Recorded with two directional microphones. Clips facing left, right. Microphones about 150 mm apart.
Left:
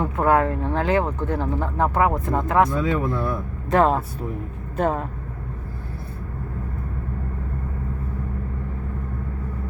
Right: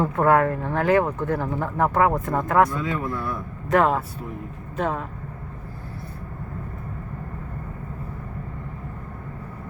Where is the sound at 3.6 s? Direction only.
30° left (ahead or behind).